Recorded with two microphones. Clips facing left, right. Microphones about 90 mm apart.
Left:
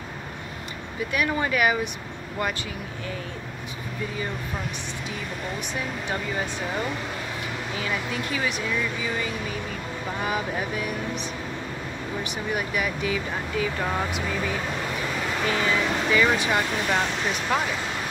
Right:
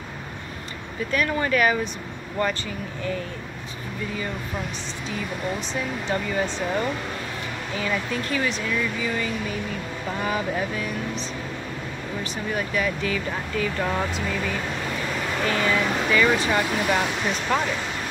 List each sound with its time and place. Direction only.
1.1 s speech: 15° left (ahead or behind)
5.6 s speech: 10° left (ahead or behind)